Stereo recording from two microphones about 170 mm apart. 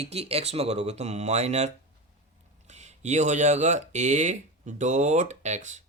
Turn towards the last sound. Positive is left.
turn(degrees=-45)  # may be behind; listen again after turning